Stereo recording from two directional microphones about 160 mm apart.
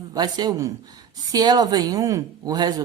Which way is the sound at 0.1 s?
25° right (ahead or behind).